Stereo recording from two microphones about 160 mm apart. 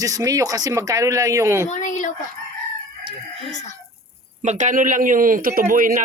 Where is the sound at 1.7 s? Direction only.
50° left (ahead or behind).